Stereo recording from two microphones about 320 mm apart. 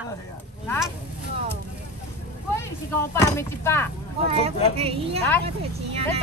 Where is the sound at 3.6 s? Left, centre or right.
Centre.